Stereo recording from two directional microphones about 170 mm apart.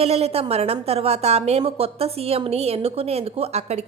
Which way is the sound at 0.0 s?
35° right (ahead or behind).